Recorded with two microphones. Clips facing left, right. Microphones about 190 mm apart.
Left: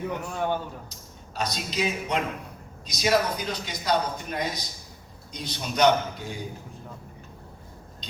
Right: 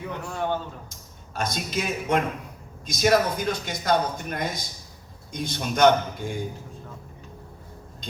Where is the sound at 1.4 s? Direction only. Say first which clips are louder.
Even; 50° right (ahead or behind).